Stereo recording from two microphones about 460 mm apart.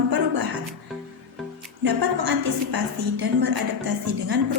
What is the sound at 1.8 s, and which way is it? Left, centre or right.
A woman's voice, right.